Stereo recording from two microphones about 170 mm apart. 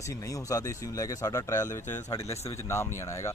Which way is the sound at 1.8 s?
45° left (ahead or behind).